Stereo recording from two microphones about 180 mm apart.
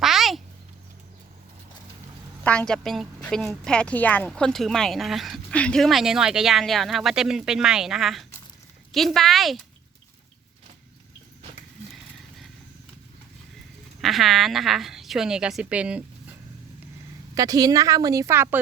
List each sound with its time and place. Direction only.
0.0 s a sound: centre (ahead or behind)
2.4 s a woman's voice: 5° left (ahead or behind)
14.0 s a woman's voice: centre (ahead or behind)
17.3 s a woman's voice: 20° right (ahead or behind)